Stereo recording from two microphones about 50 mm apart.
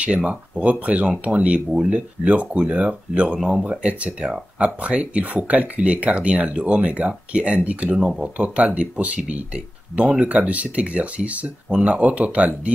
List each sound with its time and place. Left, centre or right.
0.0 s speech: right